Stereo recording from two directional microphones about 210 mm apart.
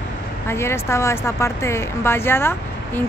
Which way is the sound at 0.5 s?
10° left (ahead or behind).